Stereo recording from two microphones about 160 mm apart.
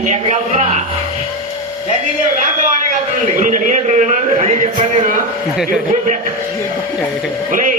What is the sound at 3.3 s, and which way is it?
Speech, 55° right (ahead or behind).